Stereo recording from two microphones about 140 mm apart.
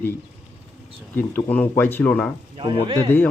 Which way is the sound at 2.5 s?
40° right (ahead or behind).